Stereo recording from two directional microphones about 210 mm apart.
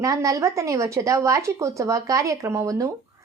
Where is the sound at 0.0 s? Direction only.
15° right (ahead or behind).